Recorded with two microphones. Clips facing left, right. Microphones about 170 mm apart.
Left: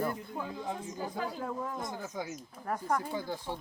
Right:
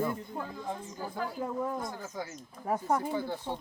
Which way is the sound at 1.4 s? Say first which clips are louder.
Right 3 dB; 15° right (ahead or behind).